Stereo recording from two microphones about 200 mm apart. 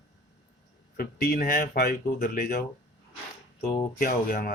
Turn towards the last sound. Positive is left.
turn(degrees=45)  # may be behind; listen again after turning